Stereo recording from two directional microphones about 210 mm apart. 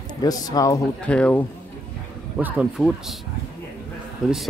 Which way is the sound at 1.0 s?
5° left (ahead or behind).